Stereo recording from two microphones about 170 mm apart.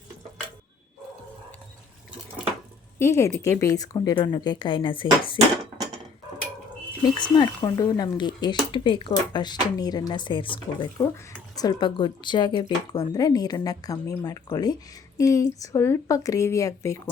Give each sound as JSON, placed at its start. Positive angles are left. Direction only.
{"t": 3.0, "sound": "speech", "side_deg": 15}
{"t": 7.2, "sound": "speech", "side_deg": 25}